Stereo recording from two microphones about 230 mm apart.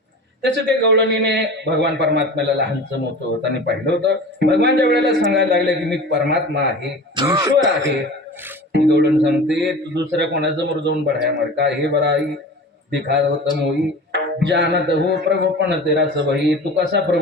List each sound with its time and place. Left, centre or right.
0.4 s a man's voice: right
7.2 s speech: centre
8.7 s a man's voice: right